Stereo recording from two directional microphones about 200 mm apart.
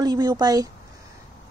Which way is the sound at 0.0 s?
20° right (ahead or behind).